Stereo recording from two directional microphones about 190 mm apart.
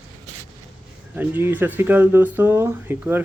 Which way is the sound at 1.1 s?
10° right (ahead or behind).